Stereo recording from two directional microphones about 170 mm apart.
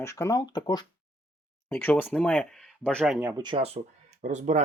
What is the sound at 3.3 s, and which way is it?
Speech, 30° right (ahead or behind).